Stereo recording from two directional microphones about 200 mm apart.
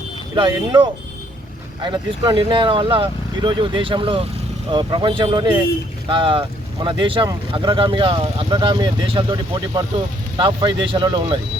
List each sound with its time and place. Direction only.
0.3 s speech: 25° right (ahead or behind)